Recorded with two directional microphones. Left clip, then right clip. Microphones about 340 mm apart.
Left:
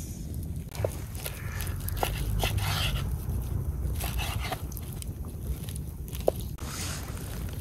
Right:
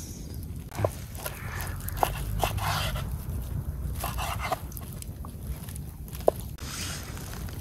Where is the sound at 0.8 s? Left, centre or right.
Right.